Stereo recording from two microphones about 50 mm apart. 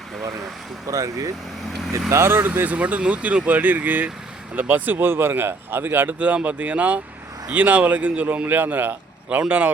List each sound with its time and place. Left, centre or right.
0.9 s speech: right
2.0 s speech: right
2.6 s speech: right
4.7 s speech: right
6.1 s speech: right